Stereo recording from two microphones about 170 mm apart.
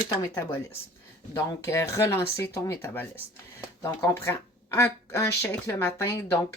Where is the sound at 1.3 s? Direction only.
15° left (ahead or behind).